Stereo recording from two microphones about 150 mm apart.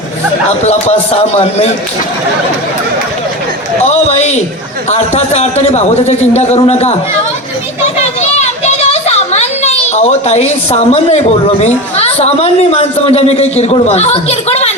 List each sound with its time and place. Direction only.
0.6 s a man's voice: 45° left (ahead or behind)
3.8 s a man's voice: 45° left (ahead or behind)
8.2 s a sound: 45° left (ahead or behind)
11.6 s a man's voice: 45° left (ahead or behind)